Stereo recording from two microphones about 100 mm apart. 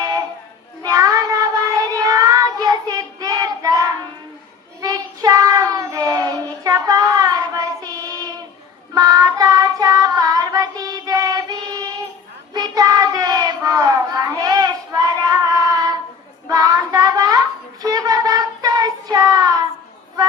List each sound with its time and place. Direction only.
0.0 s child singing: 35° right (ahead or behind)